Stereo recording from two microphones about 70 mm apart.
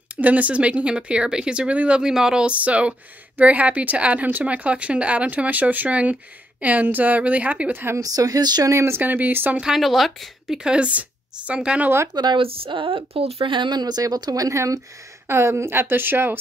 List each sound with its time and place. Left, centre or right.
0.2 s speech: right
8.0 s speech: right
8.6 s speech: right
9.0 s speech: right
9.8 s a woman's voice: centre
10.6 s speech: centre
12.1 s speech: right
13.7 s speech: right
15.2 s a woman's voice: right